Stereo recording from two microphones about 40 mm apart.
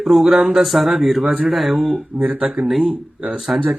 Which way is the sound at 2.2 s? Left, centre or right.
Right.